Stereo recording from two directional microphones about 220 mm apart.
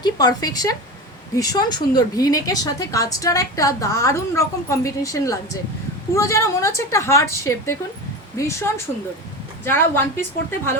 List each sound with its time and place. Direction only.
0.0 s a woman's voice: 20° left (ahead or behind)